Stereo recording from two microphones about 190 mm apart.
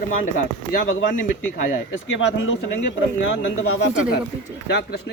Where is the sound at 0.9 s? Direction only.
90° left.